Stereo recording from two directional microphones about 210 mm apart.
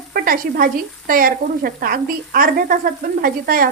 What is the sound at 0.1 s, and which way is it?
Frying, 45° right (ahead or behind).